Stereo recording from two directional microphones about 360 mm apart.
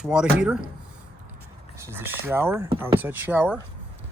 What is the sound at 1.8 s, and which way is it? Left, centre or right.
Speech, centre.